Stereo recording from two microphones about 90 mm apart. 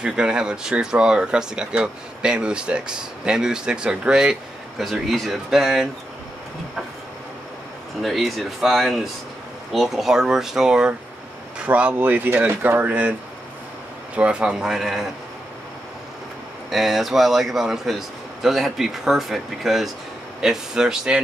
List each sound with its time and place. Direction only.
0.0 s speech: 10° right (ahead or behind)
8.0 s a man's voice: centre (ahead or behind); by 13.1 s 20° right (ahead or behind)
14.1 s speech: 10° right (ahead or behind)
16.7 s a man's voice: 5° right (ahead or behind)